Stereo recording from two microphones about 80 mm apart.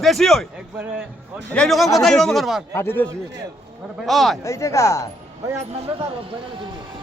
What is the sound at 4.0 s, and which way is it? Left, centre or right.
Speech, centre.